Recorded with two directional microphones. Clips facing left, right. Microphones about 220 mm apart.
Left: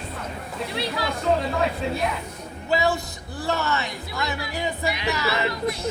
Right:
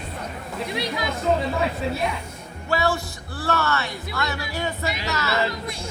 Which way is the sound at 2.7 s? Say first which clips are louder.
Left 1 dB; 20° left (ahead or behind).